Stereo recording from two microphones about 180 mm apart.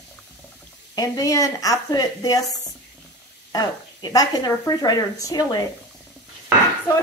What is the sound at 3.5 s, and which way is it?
A woman's voice, 20° left (ahead or behind).